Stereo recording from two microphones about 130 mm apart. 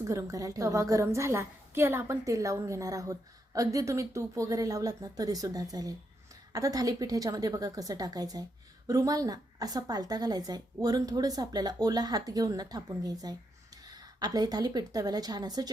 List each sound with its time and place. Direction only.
0.0 s a woman's voice: 25° right (ahead or behind)